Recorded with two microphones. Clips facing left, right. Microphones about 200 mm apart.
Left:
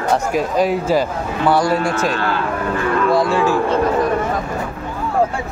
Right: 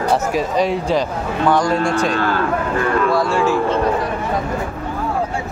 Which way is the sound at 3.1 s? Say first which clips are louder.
Left 1 dB; 15° left (ahead or behind).